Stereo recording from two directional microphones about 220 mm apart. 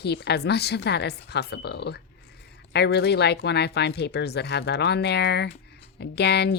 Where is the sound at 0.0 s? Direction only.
50° left (ahead or behind).